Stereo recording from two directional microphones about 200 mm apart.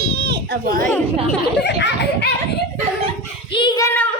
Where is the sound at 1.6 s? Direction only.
60° left (ahead or behind).